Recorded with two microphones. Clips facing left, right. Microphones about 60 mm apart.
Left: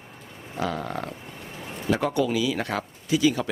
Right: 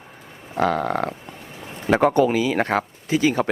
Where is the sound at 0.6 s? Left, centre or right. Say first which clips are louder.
Right 8 dB; right.